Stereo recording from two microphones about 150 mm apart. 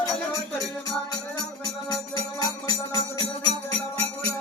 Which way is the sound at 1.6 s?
25° left (ahead or behind).